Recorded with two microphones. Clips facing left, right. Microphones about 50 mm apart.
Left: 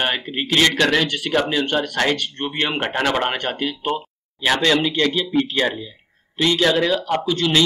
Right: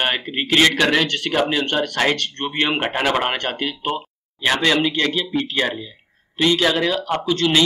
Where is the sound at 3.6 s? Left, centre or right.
Centre.